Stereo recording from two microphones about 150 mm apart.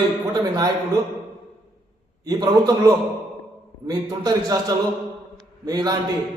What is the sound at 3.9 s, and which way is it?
A man's voice, 25° right (ahead or behind).